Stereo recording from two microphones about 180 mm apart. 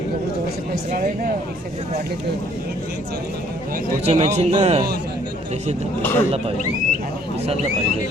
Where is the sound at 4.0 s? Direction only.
35° right (ahead or behind).